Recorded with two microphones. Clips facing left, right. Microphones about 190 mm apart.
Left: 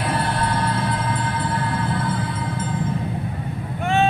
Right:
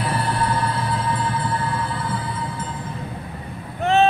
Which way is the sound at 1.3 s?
50° left (ahead or behind).